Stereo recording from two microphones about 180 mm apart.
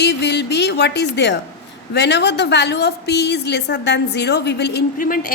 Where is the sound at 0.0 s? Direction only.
70° left (ahead or behind).